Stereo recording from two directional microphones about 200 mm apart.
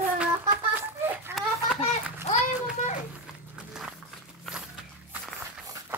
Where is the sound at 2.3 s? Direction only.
35° left (ahead or behind).